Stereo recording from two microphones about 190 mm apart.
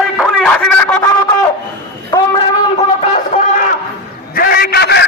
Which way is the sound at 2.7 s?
35° left (ahead or behind).